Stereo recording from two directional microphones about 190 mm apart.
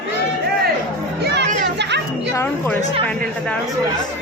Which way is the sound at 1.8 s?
65° right (ahead or behind).